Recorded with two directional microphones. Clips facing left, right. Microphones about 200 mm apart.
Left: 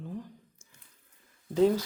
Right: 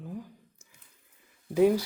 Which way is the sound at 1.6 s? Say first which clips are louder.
Right 2 dB; 10° right (ahead or behind).